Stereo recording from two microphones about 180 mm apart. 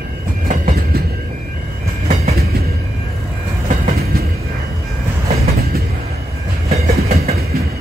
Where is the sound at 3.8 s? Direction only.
60° right (ahead or behind).